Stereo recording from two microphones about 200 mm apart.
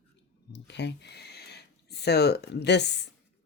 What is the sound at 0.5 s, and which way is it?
Speech, 60° left (ahead or behind).